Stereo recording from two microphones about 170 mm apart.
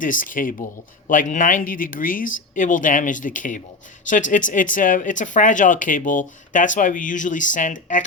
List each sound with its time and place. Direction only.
0.0 s speech: 50° left (ahead or behind)